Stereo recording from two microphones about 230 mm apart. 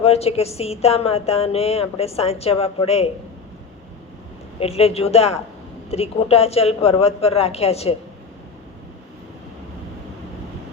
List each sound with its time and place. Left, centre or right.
0.0 s a woman's voice: left
4.6 s a woman's voice: left